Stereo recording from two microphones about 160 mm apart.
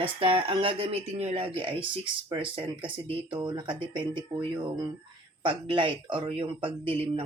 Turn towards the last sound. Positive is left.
turn(degrees=-35)  # may be behind; listen again after turning